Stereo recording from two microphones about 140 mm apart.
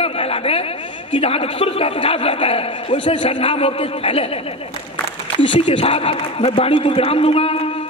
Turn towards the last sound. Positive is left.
turn(degrees=45)  # may be behind; listen again after turning